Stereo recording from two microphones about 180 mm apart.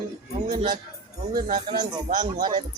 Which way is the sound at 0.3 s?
40° right (ahead or behind).